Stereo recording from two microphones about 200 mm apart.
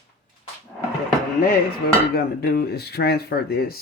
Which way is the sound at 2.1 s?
50° left (ahead or behind).